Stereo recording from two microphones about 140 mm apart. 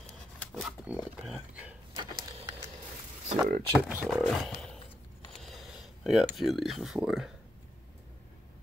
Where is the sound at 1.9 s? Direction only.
25° right (ahead or behind).